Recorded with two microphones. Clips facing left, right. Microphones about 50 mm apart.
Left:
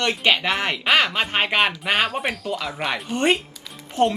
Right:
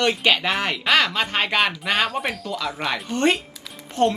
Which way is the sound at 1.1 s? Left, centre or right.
Centre.